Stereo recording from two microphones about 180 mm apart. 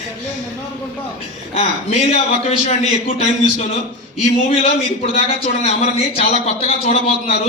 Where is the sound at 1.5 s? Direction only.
35° left (ahead or behind).